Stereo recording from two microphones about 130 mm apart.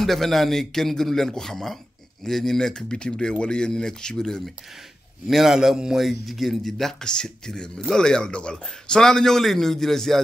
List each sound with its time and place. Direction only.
0.0 s a man's voice: centre (ahead or behind)